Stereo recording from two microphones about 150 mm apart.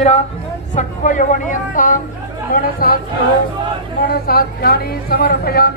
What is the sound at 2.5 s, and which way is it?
Speech, 80° left.